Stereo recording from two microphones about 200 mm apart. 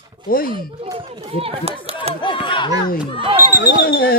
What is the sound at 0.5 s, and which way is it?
Speech, 20° right (ahead or behind).